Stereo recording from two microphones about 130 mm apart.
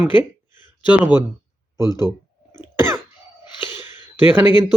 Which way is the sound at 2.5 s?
20° right (ahead or behind).